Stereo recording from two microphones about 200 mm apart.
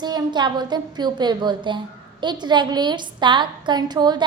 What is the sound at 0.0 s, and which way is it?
A woman's voice, 20° right (ahead or behind).